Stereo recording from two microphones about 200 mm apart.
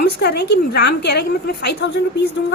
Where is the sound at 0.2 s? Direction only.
55° left (ahead or behind).